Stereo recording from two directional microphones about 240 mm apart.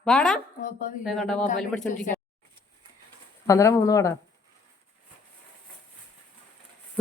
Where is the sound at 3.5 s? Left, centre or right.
Centre.